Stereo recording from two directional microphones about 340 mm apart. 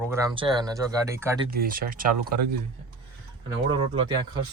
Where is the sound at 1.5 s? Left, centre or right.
Right.